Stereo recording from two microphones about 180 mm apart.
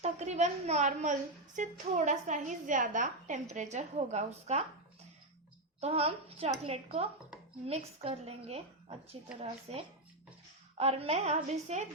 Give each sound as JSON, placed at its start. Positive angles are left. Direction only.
{"t": 0.0, "sound": "a woman's voice", "side_deg": -40}
{"t": 5.8, "sound": "a woman's voice", "side_deg": -35}